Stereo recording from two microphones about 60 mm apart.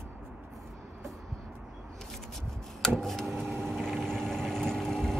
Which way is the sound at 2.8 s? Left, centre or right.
Centre.